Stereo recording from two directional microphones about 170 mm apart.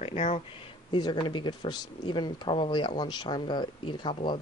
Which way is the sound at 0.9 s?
25° left (ahead or behind).